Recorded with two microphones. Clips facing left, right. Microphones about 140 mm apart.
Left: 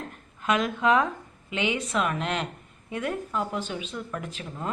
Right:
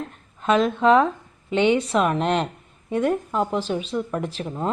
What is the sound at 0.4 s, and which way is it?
A woman's voice, 30° right (ahead or behind).